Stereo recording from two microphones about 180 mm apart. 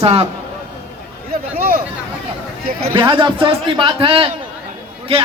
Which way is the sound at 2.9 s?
30° right (ahead or behind).